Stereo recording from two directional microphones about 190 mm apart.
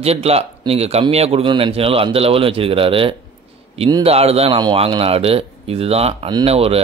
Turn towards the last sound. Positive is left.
turn(degrees=-30)  # may be behind; listen again after turning